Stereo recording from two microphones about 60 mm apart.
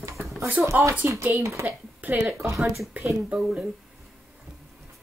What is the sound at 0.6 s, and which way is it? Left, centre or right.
Speech, right.